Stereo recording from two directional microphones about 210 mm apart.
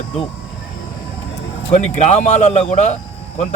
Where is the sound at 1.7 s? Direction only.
35° left (ahead or behind).